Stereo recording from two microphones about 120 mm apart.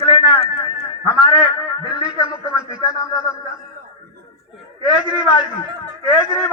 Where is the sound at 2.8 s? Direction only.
5° right (ahead or behind).